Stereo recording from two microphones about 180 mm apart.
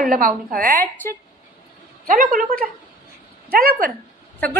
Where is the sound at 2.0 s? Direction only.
50° right (ahead or behind).